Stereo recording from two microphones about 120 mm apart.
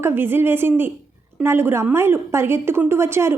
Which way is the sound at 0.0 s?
20° right (ahead or behind).